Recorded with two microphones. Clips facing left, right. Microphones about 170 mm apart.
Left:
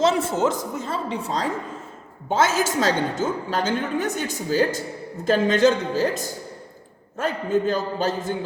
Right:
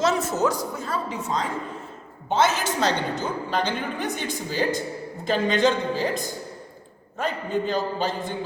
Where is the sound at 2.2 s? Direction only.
45° left (ahead or behind).